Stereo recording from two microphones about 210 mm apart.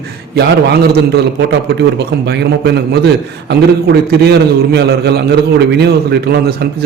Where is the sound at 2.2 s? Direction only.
55° right (ahead or behind).